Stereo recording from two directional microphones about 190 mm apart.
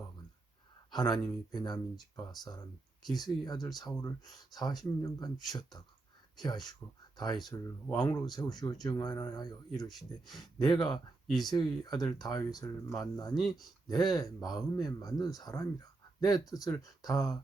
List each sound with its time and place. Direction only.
0.9 s speech: 20° left (ahead or behind)
13.3 s speech: centre (ahead or behind)
13.8 s speech: 20° left (ahead or behind)